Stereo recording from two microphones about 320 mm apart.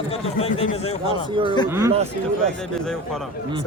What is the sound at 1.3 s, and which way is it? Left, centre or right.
Speech, centre.